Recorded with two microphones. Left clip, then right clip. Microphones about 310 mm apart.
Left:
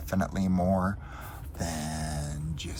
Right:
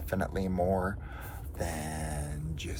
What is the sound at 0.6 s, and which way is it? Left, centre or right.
Speech, left.